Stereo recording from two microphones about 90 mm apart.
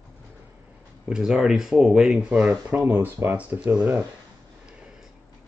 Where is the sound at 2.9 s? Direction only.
20° right (ahead or behind).